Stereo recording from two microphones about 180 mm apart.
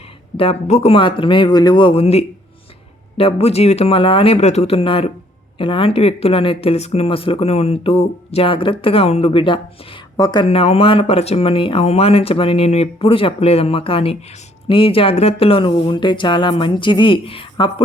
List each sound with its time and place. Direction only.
0.3 s speech: 35° left (ahead or behind)